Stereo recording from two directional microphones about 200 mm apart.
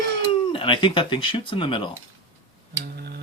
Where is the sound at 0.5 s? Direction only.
25° left (ahead or behind).